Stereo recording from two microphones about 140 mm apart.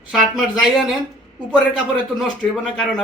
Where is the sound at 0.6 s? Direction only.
Centre (ahead or behind).